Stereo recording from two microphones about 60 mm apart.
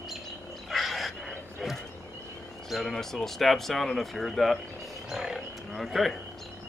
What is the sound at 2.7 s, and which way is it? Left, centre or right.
Speech, centre.